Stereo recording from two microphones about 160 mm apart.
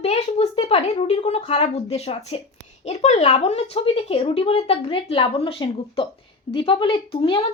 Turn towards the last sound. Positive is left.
turn(degrees=35)  # may be behind; listen again after turning